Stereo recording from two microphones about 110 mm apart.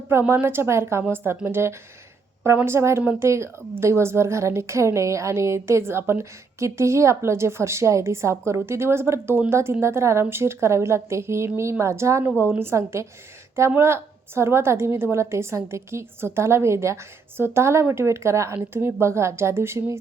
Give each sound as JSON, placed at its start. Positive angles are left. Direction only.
{"t": 0.1, "sound": "a woman's voice", "side_deg": -20}